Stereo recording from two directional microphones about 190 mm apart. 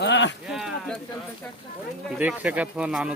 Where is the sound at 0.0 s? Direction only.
70° left (ahead or behind).